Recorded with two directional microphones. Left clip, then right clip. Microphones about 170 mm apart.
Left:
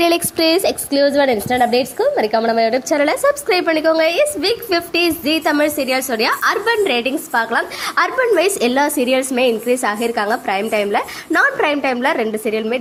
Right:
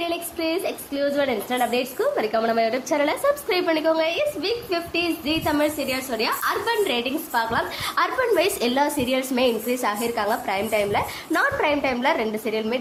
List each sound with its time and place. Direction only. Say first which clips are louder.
0.0 s a woman's voice: left 11 dB; 40° left (ahead or behind); by 12.7 s 20° left (ahead or behind)